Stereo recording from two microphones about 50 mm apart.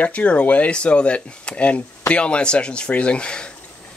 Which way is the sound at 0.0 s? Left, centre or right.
Left.